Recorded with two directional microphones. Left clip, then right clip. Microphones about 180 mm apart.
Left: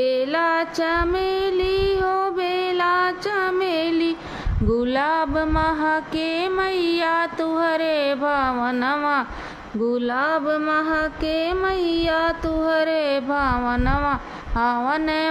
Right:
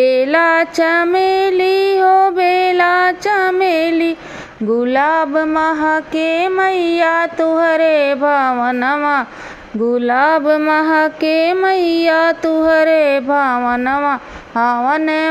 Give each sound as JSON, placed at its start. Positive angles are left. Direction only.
{"t": 0.0, "sound": "music", "side_deg": -25}
{"t": 4.8, "sound": "mantra", "side_deg": -15}